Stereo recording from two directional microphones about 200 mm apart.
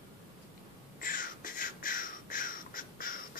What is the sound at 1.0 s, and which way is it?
Crow, 45° left (ahead or behind).